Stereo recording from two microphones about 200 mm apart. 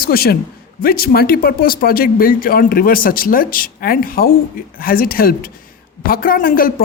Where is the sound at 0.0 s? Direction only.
50° left (ahead or behind).